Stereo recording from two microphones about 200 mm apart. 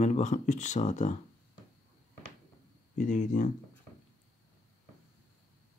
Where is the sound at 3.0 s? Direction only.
40° left (ahead or behind).